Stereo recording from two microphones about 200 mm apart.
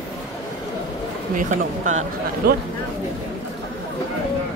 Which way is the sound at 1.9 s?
40° right (ahead or behind).